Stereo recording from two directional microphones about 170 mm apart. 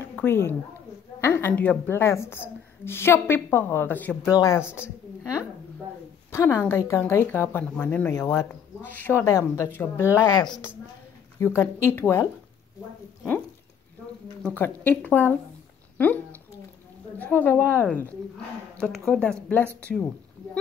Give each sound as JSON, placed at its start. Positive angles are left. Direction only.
{"t": 0.0, "sound": "speech", "side_deg": 15}
{"t": 6.3, "sound": "speech", "side_deg": 15}
{"t": 11.3, "sound": "speech", "side_deg": 15}
{"t": 14.4, "sound": "speech", "side_deg": 10}
{"t": 17.2, "sound": "speech", "side_deg": 10}